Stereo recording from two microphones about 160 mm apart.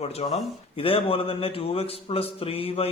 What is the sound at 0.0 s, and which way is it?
A man's voice, 40° left (ahead or behind).